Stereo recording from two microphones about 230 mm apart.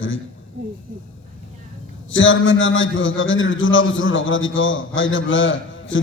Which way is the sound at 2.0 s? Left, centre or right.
Left.